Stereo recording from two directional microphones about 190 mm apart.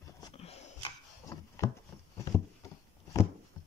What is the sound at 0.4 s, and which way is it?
Dog, 35° left (ahead or behind).